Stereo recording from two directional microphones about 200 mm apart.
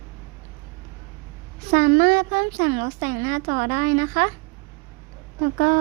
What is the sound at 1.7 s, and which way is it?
A woman's voice, 45° right (ahead or behind).